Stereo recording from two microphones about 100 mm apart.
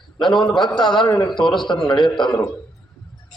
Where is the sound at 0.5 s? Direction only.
50° left (ahead or behind).